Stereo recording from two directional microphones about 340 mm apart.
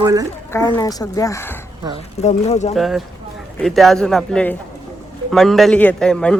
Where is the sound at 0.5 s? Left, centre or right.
Centre.